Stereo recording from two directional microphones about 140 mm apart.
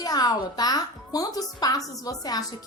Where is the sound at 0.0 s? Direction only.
25° left (ahead or behind).